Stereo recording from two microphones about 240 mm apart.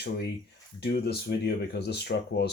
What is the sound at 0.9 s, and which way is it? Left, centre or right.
Speech, left.